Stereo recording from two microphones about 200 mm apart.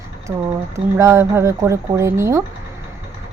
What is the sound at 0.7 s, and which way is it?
Speech, 15° right (ahead or behind).